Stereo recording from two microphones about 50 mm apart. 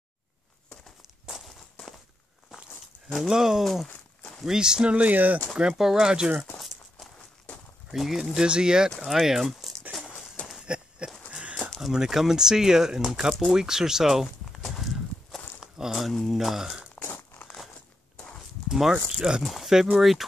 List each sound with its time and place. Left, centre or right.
1.2 s walk: centre
3.3 s speech: centre
4.9 s speech: right
5.6 s speech: centre
7.9 s speech: centre
8.4 s speech: centre
8.9 s speech: centre
9.2 s speech: centre
10.6 s a sound: right
11.8 s speech: centre
14.6 s horse: centre
15.9 s speech: centre
18.7 s speech: centre
19.4 s speech: centre